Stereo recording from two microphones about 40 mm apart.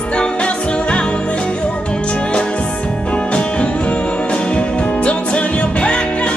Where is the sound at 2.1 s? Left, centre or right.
Left.